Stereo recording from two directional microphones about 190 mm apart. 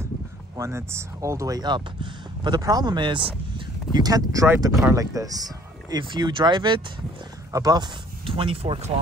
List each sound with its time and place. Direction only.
0.6 s speech: 15° right (ahead or behind); by 8.9 s 30° right (ahead or behind)